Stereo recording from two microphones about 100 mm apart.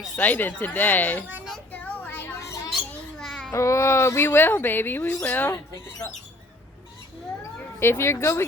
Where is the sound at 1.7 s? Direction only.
15° left (ahead or behind).